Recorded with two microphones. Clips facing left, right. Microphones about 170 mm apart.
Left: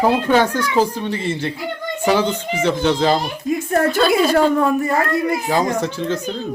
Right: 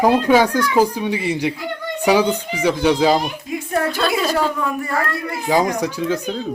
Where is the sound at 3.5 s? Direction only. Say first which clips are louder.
Left 6 dB; 45° left (ahead or behind).